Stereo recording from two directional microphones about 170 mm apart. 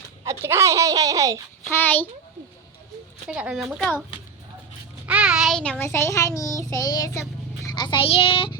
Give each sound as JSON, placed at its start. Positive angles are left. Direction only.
{"t": 0.3, "sound": "speech", "side_deg": -15}
{"t": 1.7, "sound": "a child's voice", "side_deg": 10}
{"t": 3.2, "sound": "speech", "side_deg": -5}
{"t": 5.0, "sound": "child singing", "side_deg": -5}